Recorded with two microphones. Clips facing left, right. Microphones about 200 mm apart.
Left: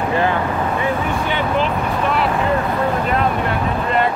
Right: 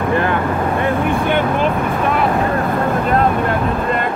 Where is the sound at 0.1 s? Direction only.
55° right (ahead or behind).